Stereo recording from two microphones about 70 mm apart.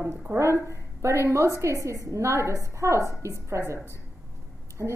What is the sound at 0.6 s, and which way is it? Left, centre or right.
A woman's voice, right.